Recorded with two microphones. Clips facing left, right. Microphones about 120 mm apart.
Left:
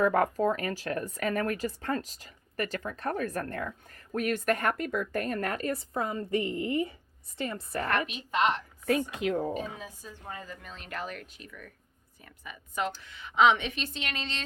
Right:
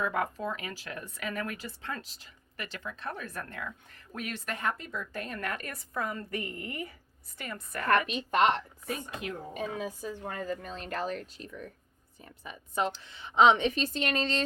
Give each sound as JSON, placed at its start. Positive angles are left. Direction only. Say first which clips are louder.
{"t": 0.0, "sound": "a woman's voice", "louder": "left 7 dB", "side_deg": 45}
{"t": 7.9, "sound": "a woman's voice", "louder": "right 6 dB", "side_deg": -55}
{"t": 8.9, "sound": "speech", "louder": "left 9 dB", "side_deg": 90}
{"t": 9.7, "sound": "a woman's voice", "louder": "right 8 dB", "side_deg": -60}
{"t": 10.7, "sound": "speech", "louder": "right 4 dB", "side_deg": -35}